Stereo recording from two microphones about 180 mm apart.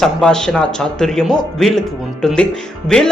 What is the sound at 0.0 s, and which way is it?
Speech, 5° left (ahead or behind).